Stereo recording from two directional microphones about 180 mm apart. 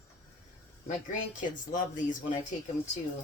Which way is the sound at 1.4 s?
45° left (ahead or behind).